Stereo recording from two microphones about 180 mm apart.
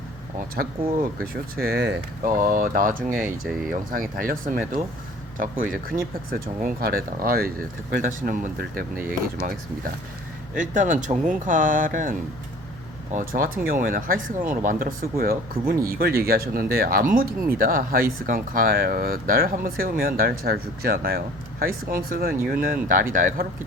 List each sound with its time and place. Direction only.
0.3 s speech: 55° right (ahead or behind)
2.2 s speech: 50° right (ahead or behind)
3.4 s speech: centre (ahead or behind)
3.7 s speech: 50° right (ahead or behind)
6.3 s speech: 50° right (ahead or behind)
10.5 s speech: 45° right (ahead or behind)
13.1 s speech: 50° right (ahead or behind)